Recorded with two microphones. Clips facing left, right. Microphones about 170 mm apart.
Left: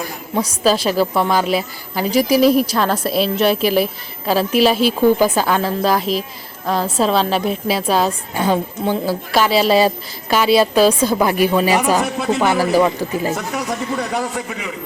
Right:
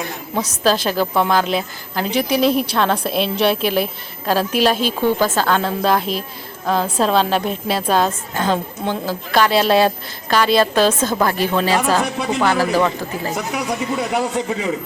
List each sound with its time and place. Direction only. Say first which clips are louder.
0.0 s a woman's voice: left 2 dB; 5° left (ahead or behind)
13.3 s a woman's voice: even; centre (ahead or behind)
14.1 s a man's voice: right 2 dB; 20° right (ahead or behind)